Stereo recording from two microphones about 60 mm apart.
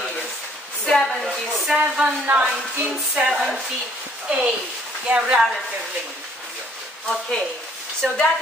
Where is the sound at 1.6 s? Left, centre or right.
Centre.